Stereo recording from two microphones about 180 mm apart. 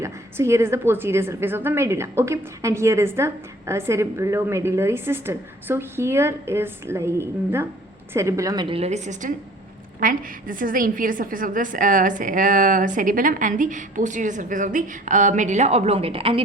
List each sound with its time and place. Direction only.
0.0 s a woman's voice: 15° right (ahead or behind); by 16.4 s 30° right (ahead or behind)